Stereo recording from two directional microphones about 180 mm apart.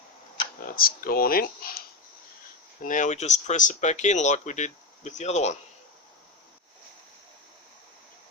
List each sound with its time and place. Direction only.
0.8 s speech: 55° left (ahead or behind)
2.8 s speech: 45° left (ahead or behind)